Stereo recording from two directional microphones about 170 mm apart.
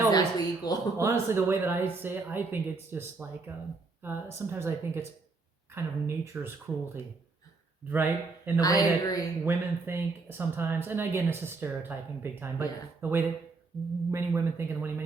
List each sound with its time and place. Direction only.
0.1 s a sound: 25° left (ahead or behind)
0.9 s speech: 15° right (ahead or behind)
7.9 s speech: 10° right (ahead or behind)
8.5 s speech: 20° left (ahead or behind)
9.4 s speech: 15° right (ahead or behind)